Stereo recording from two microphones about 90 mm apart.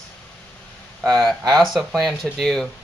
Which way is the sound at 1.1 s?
Centre (ahead or behind).